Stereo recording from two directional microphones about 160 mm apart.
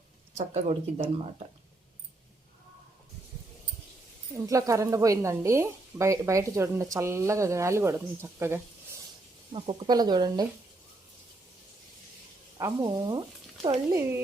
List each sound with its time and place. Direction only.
0.3 s speech: 45° right (ahead or behind)
4.4 s speech: 20° right (ahead or behind)
9.5 s speech: 30° right (ahead or behind)
12.5 s speech: 25° right (ahead or behind)